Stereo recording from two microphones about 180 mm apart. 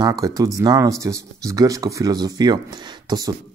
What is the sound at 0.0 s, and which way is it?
Speech, 20° right (ahead or behind).